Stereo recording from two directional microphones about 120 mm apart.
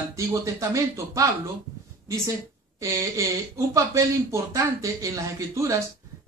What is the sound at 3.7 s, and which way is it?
Speech, 25° right (ahead or behind).